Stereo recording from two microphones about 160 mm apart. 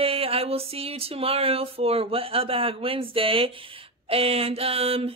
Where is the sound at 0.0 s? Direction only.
35° right (ahead or behind).